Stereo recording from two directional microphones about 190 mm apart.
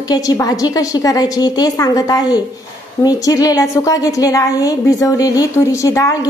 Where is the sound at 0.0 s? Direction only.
20° left (ahead or behind).